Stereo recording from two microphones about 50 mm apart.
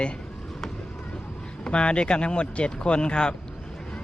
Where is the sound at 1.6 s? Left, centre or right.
Left.